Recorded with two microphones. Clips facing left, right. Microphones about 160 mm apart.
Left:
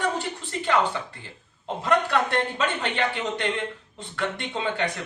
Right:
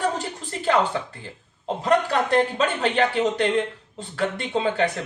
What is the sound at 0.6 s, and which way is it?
A woman's voice, 40° right (ahead or behind).